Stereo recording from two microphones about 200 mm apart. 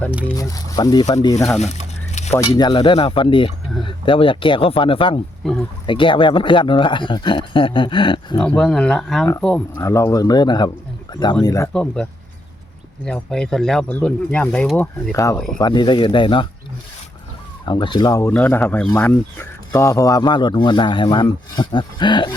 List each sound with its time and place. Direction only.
0.3 s speech: 20° left (ahead or behind)
1.4 s speech: centre (ahead or behind)
1.6 s a sound: 35° left (ahead or behind)
2.5 s speech: 25° left (ahead or behind)
5.4 s speech: 5° left (ahead or behind)
5.8 s speech: 25° left (ahead or behind)
8.4 s speech: 5° left (ahead or behind)
11.7 s speech: 5° left (ahead or behind)
13.1 s speech: 5° left (ahead or behind); by 16.5 s 25° left (ahead or behind)
17.7 s speech: 25° left (ahead or behind)